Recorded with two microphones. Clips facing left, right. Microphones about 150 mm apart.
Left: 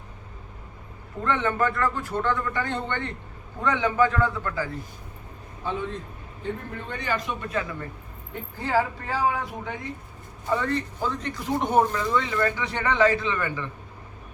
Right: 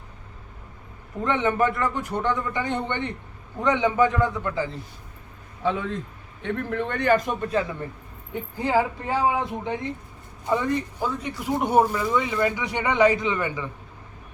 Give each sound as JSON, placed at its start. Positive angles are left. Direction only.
{"t": 1.2, "sound": "a man's voice", "side_deg": -20}
{"t": 5.6, "sound": "a man's voice", "side_deg": -90}
{"t": 7.6, "sound": "a man's voice", "side_deg": -30}
{"t": 8.6, "sound": "a man's voice", "side_deg": -20}